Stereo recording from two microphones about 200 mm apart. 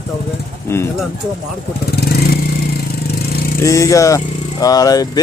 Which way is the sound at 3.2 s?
50° left (ahead or behind).